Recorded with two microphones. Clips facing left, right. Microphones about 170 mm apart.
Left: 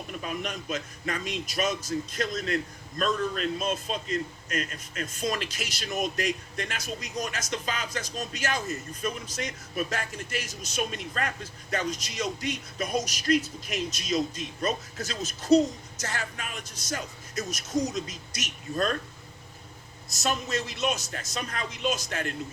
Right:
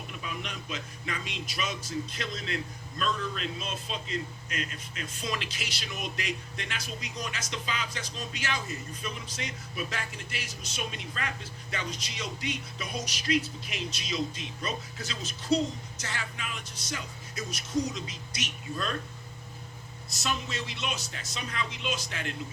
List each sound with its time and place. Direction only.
0.1 s a man's voice: 45° left (ahead or behind)
20.1 s a man's voice: 45° left (ahead or behind)